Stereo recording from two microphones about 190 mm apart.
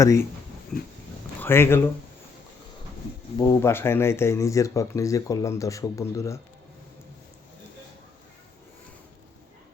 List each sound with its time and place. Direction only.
0.0 s speech: 15° left (ahead or behind)
1.4 s speech: 10° left (ahead or behind)
3.3 s speech: 15° left (ahead or behind)